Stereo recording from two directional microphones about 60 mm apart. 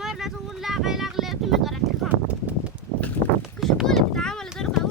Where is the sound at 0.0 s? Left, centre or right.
Centre.